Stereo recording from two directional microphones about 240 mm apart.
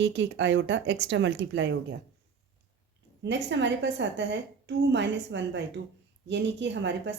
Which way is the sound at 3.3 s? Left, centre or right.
Right.